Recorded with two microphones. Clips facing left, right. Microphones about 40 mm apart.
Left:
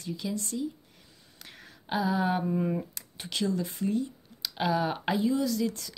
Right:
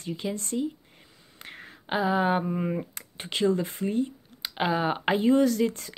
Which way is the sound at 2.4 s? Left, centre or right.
Right.